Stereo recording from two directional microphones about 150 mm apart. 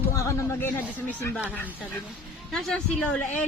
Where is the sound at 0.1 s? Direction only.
20° left (ahead or behind).